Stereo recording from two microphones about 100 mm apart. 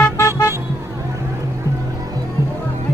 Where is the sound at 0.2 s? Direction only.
30° left (ahead or behind).